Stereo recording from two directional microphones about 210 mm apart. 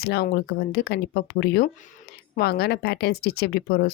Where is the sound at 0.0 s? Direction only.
50° left (ahead or behind).